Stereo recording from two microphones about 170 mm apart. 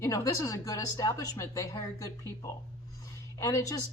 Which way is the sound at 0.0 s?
20° left (ahead or behind).